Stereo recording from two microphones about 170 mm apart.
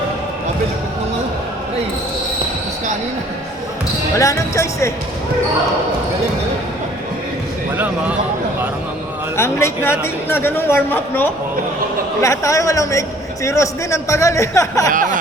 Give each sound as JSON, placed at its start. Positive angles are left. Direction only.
{"t": 4.2, "sound": "a man's voice", "side_deg": 20}
{"t": 9.4, "sound": "a man's voice", "side_deg": 15}